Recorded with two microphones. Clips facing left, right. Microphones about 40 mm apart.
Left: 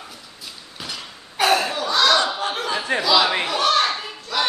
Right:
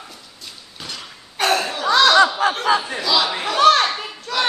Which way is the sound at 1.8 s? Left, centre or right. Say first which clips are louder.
Right 7 dB; right.